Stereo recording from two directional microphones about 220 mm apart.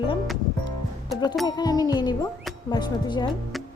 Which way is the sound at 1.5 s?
20° left (ahead or behind).